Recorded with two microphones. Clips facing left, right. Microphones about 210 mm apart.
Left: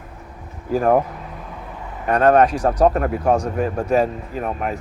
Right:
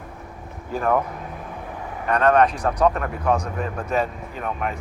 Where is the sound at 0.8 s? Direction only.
40° left (ahead or behind).